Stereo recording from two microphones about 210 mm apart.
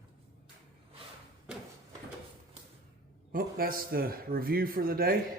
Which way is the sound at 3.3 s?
45° right (ahead or behind).